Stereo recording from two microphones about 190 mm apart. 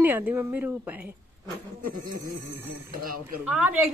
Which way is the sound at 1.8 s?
45° right (ahead or behind).